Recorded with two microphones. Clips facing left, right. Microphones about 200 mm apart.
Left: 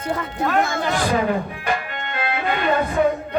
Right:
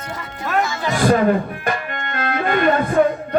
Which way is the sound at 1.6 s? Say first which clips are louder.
Right 1 dB; 50° right (ahead or behind).